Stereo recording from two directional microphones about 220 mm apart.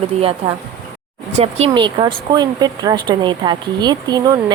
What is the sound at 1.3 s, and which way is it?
A woman's voice, 25° right (ahead or behind).